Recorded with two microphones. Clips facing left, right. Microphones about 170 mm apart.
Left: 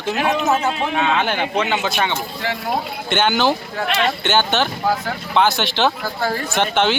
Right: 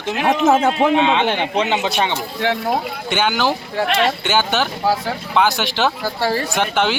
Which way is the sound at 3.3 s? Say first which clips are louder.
Left 1 dB; 5° right (ahead or behind).